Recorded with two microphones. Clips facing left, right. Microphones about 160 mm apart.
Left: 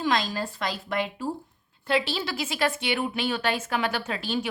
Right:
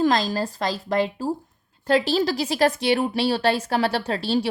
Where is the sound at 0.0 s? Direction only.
40° right (ahead or behind).